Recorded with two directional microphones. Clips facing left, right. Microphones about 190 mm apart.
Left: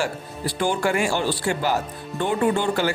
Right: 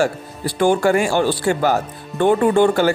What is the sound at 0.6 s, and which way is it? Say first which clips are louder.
Speech: right 7 dB; 50° right (ahead or behind).